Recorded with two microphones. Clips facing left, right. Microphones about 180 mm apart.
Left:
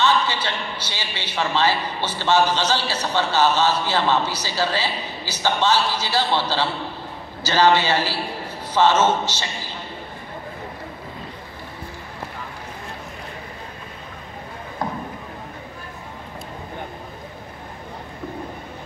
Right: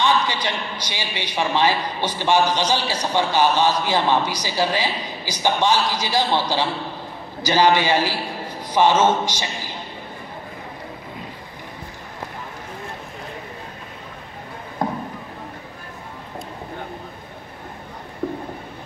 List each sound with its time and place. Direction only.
0.0 s a man's voice: 15° right (ahead or behind)
7.4 s a man's voice: 15° right (ahead or behind)
14.8 s a sound: 25° right (ahead or behind)